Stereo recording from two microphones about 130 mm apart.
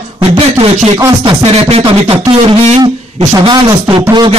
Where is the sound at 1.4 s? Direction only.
50° right (ahead or behind).